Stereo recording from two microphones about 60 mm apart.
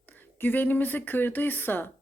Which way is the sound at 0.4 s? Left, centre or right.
Left.